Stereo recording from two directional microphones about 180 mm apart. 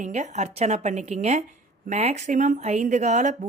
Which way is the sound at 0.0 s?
40° right (ahead or behind).